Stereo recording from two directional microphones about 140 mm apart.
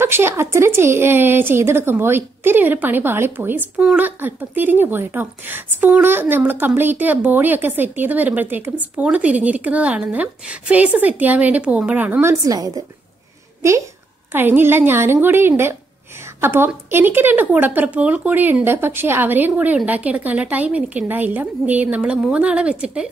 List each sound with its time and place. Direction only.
0.0 s a woman's voice: 15° right (ahead or behind)